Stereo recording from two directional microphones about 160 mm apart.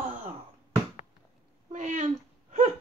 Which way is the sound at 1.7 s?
50° right (ahead or behind).